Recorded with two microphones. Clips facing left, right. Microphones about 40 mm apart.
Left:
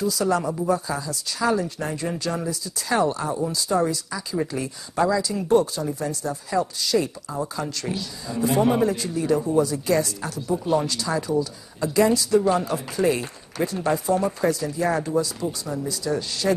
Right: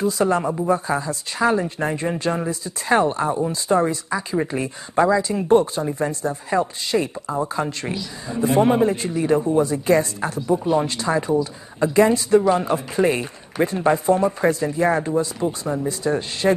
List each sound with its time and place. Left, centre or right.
0.0 s speech: right